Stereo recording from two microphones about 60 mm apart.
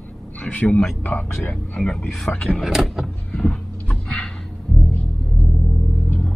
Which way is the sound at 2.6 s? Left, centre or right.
Centre.